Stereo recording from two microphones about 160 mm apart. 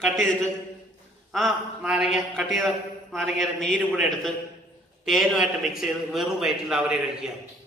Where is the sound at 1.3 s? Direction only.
5° right (ahead or behind).